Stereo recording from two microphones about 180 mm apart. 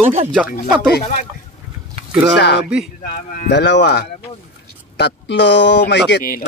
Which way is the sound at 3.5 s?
75° left (ahead or behind).